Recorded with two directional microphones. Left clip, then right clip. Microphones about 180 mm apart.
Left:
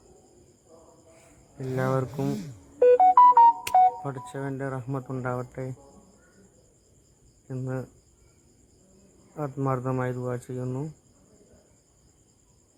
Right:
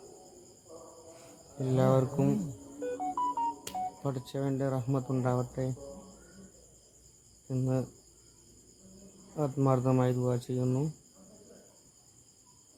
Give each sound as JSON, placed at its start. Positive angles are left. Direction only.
{"t": 1.7, "sound": "speech", "side_deg": 15}
{"t": 2.8, "sound": "music", "side_deg": 55}
{"t": 4.0, "sound": "speech", "side_deg": 15}
{"t": 7.4, "sound": "cricket", "side_deg": 15}
{"t": 9.3, "sound": "speech", "side_deg": 15}